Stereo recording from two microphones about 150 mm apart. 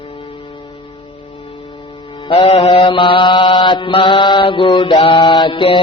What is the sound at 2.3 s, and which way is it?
Mantra, 35° left (ahead or behind).